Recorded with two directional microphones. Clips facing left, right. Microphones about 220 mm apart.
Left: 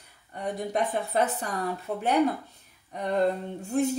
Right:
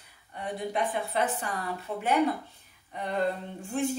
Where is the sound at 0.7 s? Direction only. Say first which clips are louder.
Left 3 dB; 40° left (ahead or behind).